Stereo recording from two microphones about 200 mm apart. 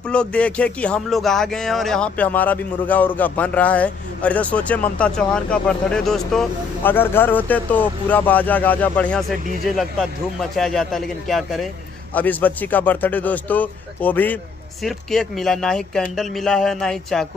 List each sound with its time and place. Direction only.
0.1 s speech: 5° left (ahead or behind)
10.5 s a man's voice: centre (ahead or behind)